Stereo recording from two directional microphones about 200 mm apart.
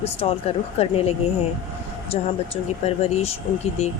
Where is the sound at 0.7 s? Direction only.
30° left (ahead or behind).